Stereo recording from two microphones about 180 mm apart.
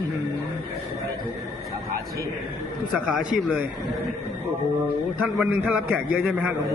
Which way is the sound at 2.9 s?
5° right (ahead or behind).